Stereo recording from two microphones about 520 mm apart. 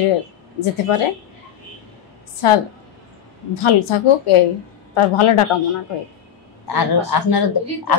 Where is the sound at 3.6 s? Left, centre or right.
Left.